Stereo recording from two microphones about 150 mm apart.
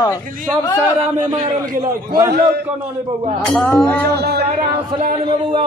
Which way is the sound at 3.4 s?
5° left (ahead or behind).